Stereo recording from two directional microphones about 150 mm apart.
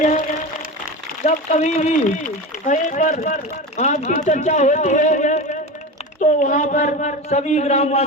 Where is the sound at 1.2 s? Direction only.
55° left (ahead or behind).